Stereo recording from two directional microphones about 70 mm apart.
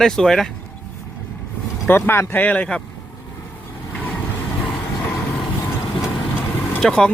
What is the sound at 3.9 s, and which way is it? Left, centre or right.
Vehicle, left.